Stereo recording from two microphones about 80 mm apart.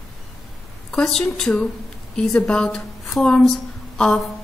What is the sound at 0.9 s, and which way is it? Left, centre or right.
A woman's voice, centre.